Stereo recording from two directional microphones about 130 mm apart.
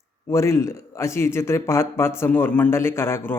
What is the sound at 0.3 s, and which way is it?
Speech, 20° left (ahead or behind).